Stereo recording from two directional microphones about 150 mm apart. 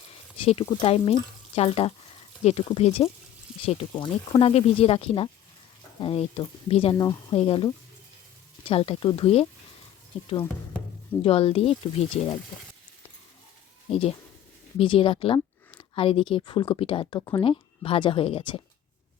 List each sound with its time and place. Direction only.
0.1 s a sound: 40° left (ahead or behind)
0.6 s speech: 35° left (ahead or behind)
4.3 s speech: 35° left (ahead or behind)
6.9 s a woman's voice: 20° left (ahead or behind)
7.3 s speech: 35° left (ahead or behind)
11.2 s speech: 40° left (ahead or behind)
14.8 s speech: 35° left (ahead or behind)